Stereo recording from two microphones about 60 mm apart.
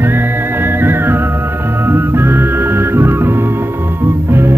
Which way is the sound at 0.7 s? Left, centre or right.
Right.